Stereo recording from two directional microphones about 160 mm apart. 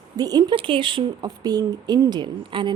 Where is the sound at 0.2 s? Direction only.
25° right (ahead or behind).